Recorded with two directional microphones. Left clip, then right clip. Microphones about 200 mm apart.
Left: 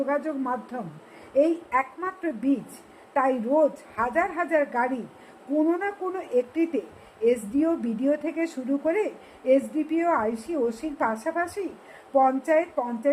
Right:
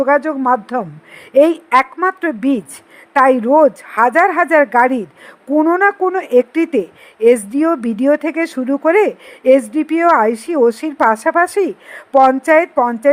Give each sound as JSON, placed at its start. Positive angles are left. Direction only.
{"t": 0.0, "sound": "a woman's voice", "side_deg": -40}